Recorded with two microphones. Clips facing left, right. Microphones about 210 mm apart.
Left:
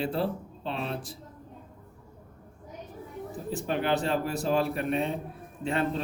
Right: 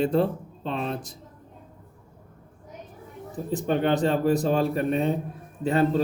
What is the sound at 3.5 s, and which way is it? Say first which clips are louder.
Speech: right 5 dB; 35° right (ahead or behind).